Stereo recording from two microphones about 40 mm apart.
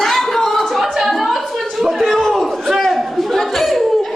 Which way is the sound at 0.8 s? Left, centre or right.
Centre.